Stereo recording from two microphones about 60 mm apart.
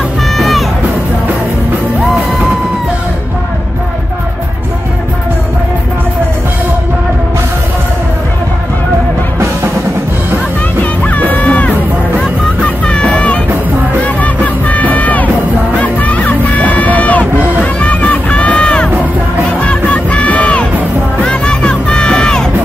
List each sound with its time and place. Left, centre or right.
0.4 s music: centre
10.8 s music: left
17.7 s crowd: left
19.6 s music: left
21.2 s crowd: centre